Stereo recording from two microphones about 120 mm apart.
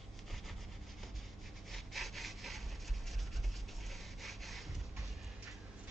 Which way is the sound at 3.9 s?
Centre (ahead or behind).